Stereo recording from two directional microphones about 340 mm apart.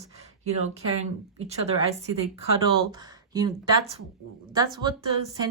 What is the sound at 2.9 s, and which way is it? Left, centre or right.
A woman's voice, centre.